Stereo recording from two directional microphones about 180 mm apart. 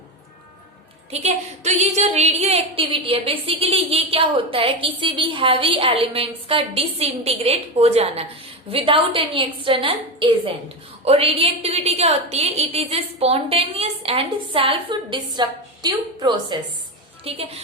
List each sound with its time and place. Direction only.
1.1 s a woman's voice: 40° right (ahead or behind)